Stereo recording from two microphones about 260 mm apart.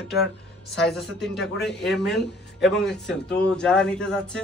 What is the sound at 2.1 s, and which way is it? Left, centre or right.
Speech, centre.